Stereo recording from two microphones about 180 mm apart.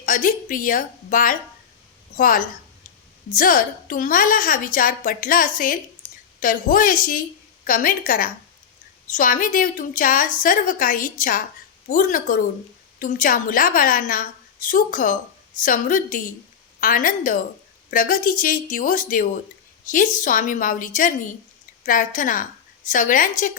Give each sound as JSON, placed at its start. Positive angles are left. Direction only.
{"t": 0.0, "sound": "a woman's voice", "side_deg": 50}